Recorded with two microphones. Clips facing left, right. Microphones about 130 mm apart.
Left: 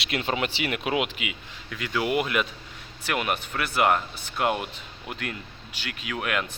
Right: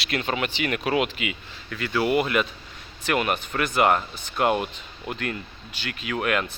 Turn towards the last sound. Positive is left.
turn(degrees=5)  # may be behind; listen again after turning